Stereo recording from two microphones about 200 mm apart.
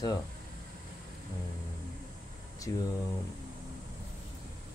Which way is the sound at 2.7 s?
15° left (ahead or behind).